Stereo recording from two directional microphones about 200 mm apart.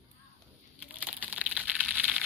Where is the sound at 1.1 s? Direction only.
5° right (ahead or behind).